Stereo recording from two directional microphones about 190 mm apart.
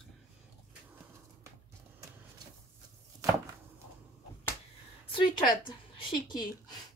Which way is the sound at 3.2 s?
15° right (ahead or behind).